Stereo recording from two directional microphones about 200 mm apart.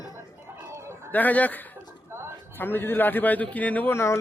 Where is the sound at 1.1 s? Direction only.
10° left (ahead or behind).